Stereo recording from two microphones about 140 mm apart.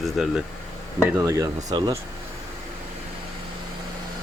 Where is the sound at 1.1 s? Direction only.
20° right (ahead or behind).